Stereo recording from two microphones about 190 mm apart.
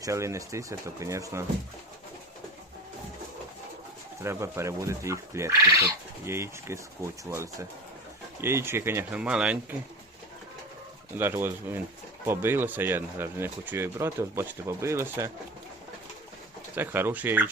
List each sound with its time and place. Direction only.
0.0 s speech: 15° right (ahead or behind)
4.2 s speech: 15° right (ahead or behind)
11.2 s speech: 10° right (ahead or behind)
16.7 s speech: 10° right (ahead or behind)